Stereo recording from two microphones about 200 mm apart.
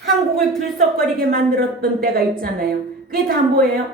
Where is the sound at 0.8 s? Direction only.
45° right (ahead or behind).